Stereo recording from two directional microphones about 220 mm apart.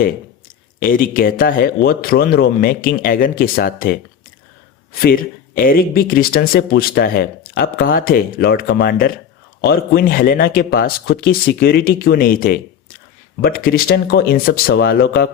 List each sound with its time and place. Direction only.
0.8 s speech: 40° left (ahead or behind)
4.9 s speech: 40° left (ahead or behind)